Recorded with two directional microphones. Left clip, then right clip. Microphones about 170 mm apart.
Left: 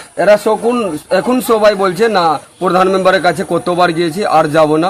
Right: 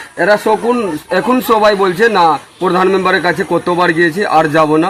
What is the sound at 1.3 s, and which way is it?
A man's voice, 35° left (ahead or behind).